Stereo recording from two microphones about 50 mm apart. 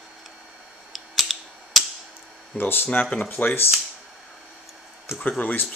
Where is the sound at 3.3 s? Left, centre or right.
Left.